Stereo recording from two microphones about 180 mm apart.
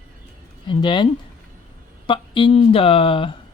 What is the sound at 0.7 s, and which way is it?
Speech, 25° left (ahead or behind).